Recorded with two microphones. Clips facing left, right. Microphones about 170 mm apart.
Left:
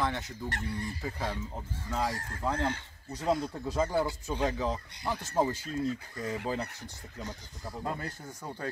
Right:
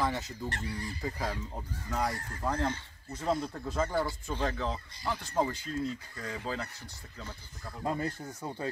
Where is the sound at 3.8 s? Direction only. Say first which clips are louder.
Left 2 dB; 10° left (ahead or behind).